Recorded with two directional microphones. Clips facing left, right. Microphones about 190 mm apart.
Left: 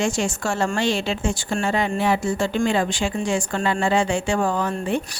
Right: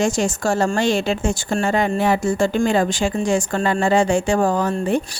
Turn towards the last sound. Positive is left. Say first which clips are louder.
# right 4 dB
turn(degrees=-40)  # may be behind; listen again after turning